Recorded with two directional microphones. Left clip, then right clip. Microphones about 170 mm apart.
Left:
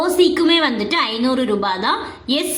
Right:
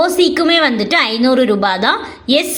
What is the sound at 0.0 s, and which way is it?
A woman's voice, 25° right (ahead or behind).